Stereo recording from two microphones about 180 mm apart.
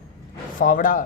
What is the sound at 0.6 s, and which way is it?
Speech, 50° left (ahead or behind).